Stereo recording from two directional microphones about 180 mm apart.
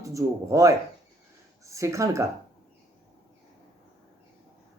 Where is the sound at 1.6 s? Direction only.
15° right (ahead or behind).